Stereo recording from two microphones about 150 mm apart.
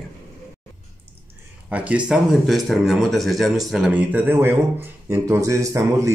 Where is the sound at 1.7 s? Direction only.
10° right (ahead or behind).